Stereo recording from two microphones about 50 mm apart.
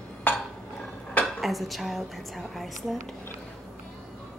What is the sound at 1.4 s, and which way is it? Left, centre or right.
Speech, centre.